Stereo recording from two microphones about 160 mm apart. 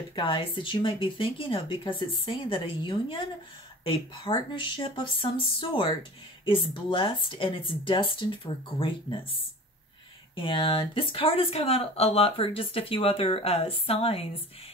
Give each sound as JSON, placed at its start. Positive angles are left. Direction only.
{"t": 0.1, "sound": "speech", "side_deg": 30}